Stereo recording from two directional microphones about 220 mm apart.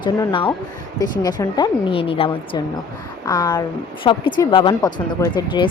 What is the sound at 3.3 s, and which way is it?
Speech, 15° left (ahead or behind).